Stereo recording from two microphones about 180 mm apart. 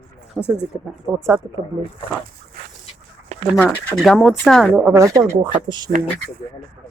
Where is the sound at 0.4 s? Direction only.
5° right (ahead or behind).